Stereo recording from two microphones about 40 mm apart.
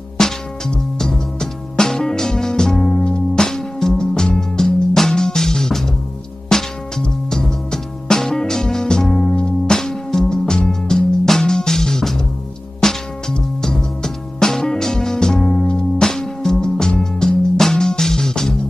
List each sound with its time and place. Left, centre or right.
0.2 s music: centre